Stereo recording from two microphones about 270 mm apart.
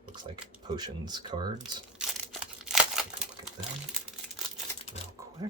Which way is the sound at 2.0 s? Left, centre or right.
Centre.